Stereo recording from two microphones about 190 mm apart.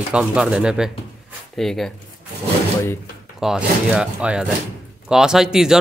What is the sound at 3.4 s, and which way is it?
Speech, 5° right (ahead or behind).